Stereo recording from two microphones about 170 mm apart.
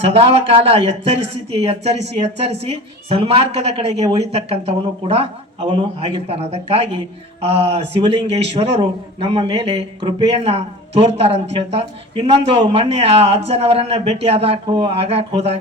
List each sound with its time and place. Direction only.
0.0 s a man's voice: 35° right (ahead or behind)